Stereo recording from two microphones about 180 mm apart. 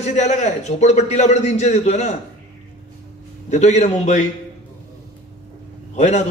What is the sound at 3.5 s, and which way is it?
Speech, 40° left (ahead or behind).